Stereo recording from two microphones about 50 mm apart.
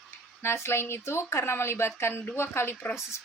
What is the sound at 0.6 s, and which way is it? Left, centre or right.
A woman's voice, left.